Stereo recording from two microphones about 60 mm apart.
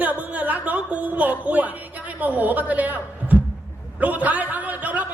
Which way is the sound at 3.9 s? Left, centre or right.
Right.